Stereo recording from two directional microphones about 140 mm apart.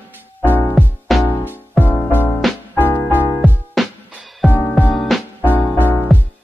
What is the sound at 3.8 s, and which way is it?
Music, centre (ahead or behind).